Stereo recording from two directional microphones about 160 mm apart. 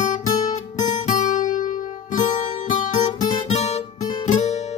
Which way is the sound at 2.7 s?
50° left (ahead or behind).